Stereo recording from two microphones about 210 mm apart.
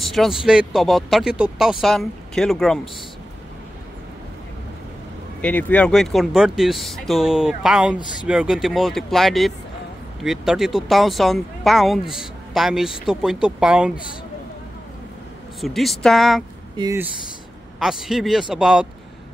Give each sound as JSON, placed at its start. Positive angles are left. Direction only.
{"t": 0.0, "sound": "speech", "side_deg": 0}
{"t": 5.4, "sound": "speech", "side_deg": 5}
{"t": 15.6, "sound": "speech", "side_deg": 0}
{"t": 16.7, "sound": "speech", "side_deg": -20}
{"t": 17.7, "sound": "speech", "side_deg": 0}